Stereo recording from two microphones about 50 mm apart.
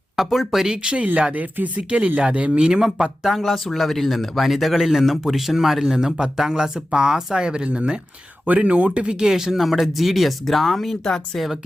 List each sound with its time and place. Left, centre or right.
0.2 s speech: centre
1.0 s speech: right
9.1 s speech: centre